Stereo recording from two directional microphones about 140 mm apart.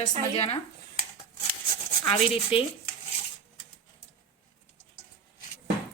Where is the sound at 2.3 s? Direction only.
40° left (ahead or behind).